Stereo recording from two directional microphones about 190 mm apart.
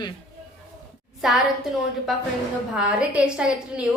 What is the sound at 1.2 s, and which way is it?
A woman's voice, centre (ahead or behind).